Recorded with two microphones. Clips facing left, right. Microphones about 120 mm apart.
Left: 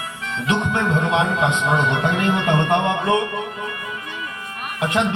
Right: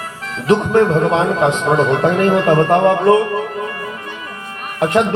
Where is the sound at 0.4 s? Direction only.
35° right (ahead or behind).